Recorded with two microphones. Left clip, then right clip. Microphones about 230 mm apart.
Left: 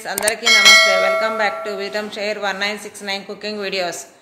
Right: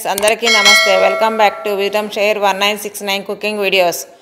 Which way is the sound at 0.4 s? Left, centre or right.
Centre.